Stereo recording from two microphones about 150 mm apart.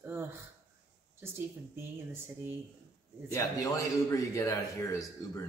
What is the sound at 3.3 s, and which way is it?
Speech, 20° left (ahead or behind).